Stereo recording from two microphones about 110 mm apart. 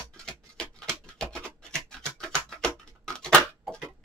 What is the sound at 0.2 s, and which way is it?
Tick-tock, 5° left (ahead or behind).